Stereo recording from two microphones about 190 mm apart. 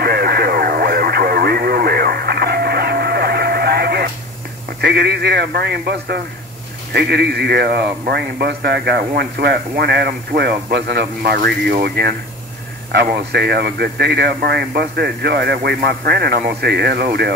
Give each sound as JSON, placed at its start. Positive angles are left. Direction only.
{"t": 0.0, "sound": "radio", "side_deg": -55}
{"t": 4.8, "sound": "speech", "side_deg": -60}